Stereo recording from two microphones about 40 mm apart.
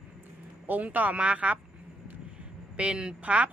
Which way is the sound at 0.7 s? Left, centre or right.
Right.